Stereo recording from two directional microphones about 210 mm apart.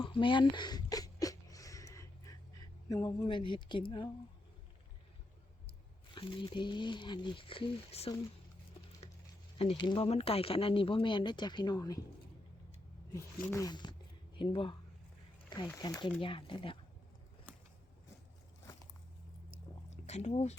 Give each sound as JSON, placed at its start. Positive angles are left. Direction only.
{"t": 0.0, "sound": "a sound", "side_deg": 25}
{"t": 2.9, "sound": "speech", "side_deg": 15}
{"t": 6.1, "sound": "speech", "side_deg": 25}
{"t": 9.6, "sound": "speech", "side_deg": 25}
{"t": 13.5, "sound": "speech", "side_deg": 15}
{"t": 19.9, "sound": "speech", "side_deg": 30}